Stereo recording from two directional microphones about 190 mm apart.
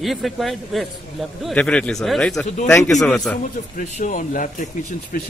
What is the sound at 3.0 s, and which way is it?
Speech, 5° left (ahead or behind).